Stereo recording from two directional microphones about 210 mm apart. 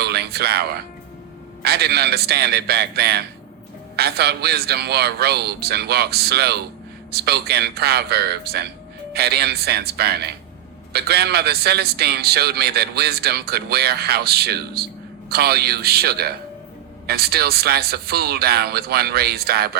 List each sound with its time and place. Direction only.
0.0 s music: 50° right (ahead or behind)
1.6 s a man's voice: 50° right (ahead or behind)